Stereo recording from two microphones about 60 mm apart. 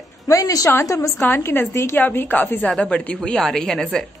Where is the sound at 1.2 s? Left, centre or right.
Left.